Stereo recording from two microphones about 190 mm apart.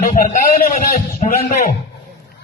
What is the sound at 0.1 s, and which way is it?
A man's voice, 40° left (ahead or behind).